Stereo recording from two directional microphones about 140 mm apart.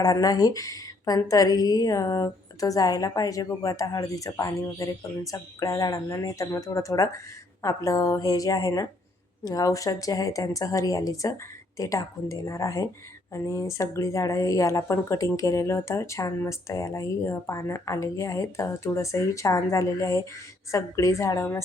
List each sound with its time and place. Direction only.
0.0 s a woman's voice: 25° left (ahead or behind)